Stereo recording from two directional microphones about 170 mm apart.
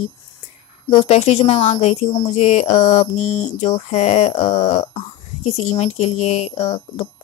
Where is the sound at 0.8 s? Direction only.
40° left (ahead or behind).